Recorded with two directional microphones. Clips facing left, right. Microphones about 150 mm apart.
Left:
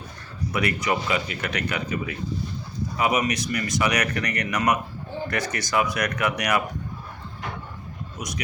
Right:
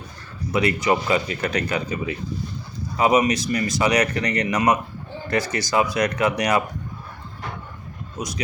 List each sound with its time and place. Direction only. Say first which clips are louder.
0.5 s speech: right 5 dB; 25° right (ahead or behind)
8.2 s speech: right 5 dB; 30° right (ahead or behind)